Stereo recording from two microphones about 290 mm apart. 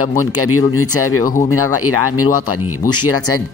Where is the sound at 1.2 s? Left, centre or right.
Left.